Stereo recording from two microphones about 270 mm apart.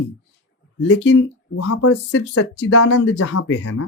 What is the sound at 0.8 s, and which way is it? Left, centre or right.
Speech, left.